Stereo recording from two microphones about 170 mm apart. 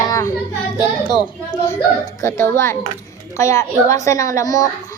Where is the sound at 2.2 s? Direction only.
15° left (ahead or behind).